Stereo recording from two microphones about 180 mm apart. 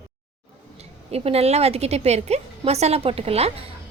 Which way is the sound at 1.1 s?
35° right (ahead or behind).